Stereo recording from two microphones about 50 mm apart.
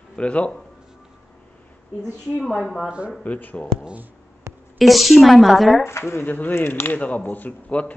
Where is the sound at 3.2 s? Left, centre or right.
Left.